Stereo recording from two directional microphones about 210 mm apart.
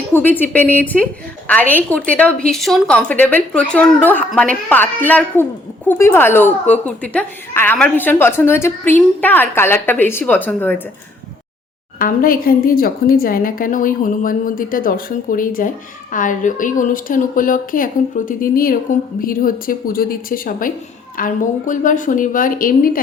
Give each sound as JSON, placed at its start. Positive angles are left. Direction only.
{"t": 0.1, "sound": "speech", "side_deg": 10}
{"t": 11.9, "sound": "a woman's voice", "side_deg": 40}